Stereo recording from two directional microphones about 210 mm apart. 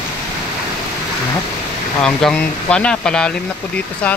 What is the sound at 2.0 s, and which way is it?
Speech, 5° left (ahead or behind).